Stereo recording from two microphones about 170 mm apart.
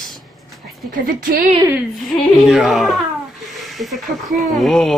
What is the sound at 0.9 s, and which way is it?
Speech, 55° right (ahead or behind).